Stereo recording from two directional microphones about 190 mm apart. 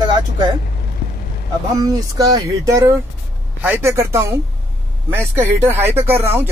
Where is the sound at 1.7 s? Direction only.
20° right (ahead or behind).